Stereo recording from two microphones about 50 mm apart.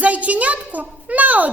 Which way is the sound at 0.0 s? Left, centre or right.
Right.